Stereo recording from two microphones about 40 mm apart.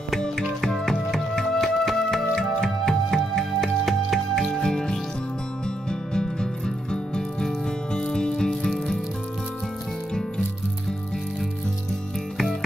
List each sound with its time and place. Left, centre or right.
0.7 s music: centre
4.6 s music: centre